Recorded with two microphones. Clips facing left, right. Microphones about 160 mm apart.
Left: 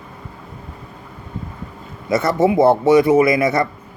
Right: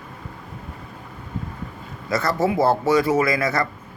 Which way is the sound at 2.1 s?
20° left (ahead or behind).